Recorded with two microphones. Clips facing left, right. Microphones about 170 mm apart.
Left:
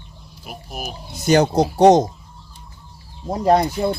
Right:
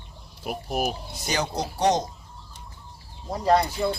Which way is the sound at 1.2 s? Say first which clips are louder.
Left 12 dB; 50° left (ahead or behind).